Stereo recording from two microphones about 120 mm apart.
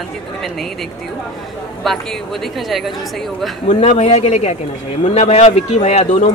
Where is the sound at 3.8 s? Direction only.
65° left (ahead or behind).